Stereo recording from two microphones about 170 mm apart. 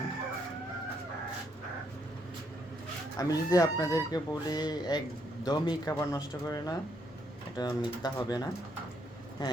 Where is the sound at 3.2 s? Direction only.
20° left (ahead or behind).